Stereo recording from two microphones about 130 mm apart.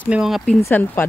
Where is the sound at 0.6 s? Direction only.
15° left (ahead or behind).